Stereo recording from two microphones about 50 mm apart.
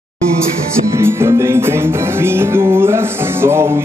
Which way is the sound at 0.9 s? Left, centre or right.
Right.